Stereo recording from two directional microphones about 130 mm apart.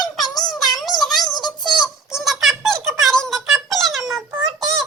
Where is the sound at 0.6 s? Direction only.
Centre (ahead or behind).